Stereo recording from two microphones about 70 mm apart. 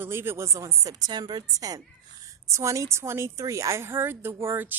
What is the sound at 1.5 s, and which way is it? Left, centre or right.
Speech, right.